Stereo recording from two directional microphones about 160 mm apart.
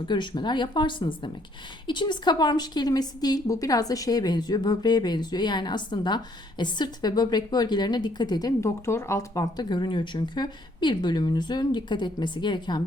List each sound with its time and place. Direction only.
0.0 s a woman's voice: 30° left (ahead or behind)